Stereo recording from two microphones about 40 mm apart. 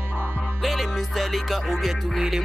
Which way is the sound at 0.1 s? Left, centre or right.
Right.